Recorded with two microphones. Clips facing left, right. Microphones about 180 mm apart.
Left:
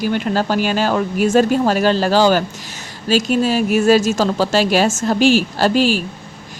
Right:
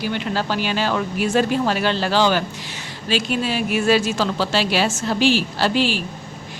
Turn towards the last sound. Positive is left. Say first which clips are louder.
# left 5 dB
turn(degrees=45)  # may be behind; listen again after turning